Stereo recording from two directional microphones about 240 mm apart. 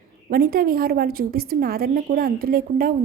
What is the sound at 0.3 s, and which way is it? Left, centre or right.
A woman's voice, right.